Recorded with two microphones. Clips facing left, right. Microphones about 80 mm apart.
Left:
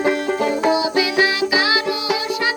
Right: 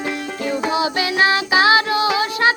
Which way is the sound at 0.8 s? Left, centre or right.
Right.